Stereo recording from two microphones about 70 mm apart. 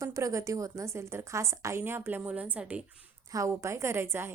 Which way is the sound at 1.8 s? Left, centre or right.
Right.